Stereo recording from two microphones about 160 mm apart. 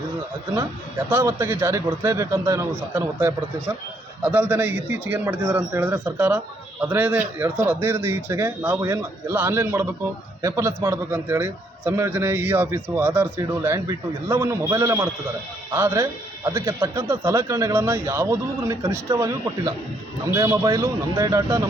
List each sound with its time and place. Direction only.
0.5 s a man's voice: 20° right (ahead or behind)